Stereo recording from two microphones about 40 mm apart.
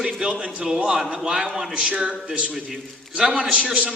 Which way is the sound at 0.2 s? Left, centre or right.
Right.